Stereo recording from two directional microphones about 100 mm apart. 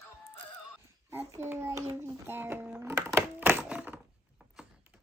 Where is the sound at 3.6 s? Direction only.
10° right (ahead or behind).